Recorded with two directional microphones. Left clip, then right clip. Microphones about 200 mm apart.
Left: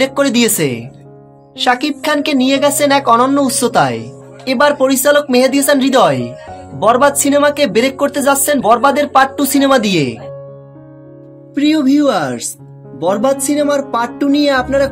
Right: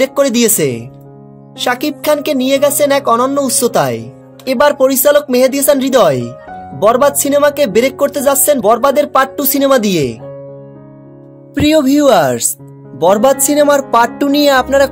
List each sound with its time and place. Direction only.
0.0 s speech: 50° right (ahead or behind)
11.5 s speech: 55° right (ahead or behind)